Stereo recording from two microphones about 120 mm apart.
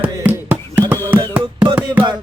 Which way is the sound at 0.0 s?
15° right (ahead or behind).